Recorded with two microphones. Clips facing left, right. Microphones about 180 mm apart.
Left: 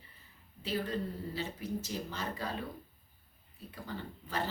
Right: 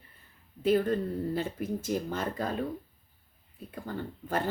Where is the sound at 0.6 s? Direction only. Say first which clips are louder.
Right 10 dB; 50° right (ahead or behind).